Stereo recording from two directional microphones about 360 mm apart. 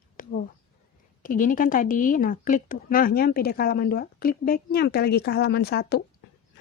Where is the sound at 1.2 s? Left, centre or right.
Left.